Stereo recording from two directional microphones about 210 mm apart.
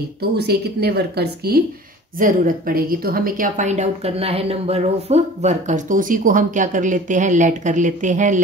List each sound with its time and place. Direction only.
0.2 s a woman's voice: 50° right (ahead or behind)